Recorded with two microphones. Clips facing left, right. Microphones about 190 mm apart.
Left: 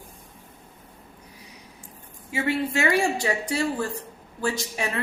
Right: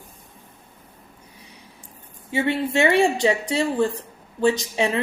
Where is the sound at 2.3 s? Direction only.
25° right (ahead or behind).